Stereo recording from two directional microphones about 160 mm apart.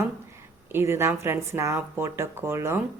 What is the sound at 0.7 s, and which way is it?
A woman's voice, 15° right (ahead or behind).